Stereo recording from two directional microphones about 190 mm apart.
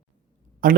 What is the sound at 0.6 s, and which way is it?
Speech, 45° right (ahead or behind).